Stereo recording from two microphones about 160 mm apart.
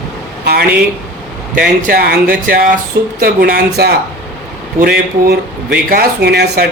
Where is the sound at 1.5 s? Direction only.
60° right (ahead or behind).